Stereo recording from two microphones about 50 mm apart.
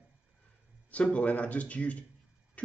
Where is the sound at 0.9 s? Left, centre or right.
Left.